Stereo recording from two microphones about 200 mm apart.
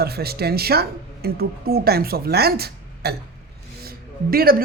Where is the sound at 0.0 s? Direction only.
50° right (ahead or behind).